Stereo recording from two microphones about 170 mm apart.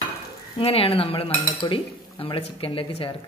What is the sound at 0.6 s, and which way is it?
Speech, 35° left (ahead or behind).